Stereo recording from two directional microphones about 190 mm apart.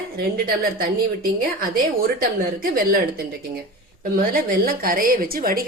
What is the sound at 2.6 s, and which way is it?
Speech, 50° right (ahead or behind).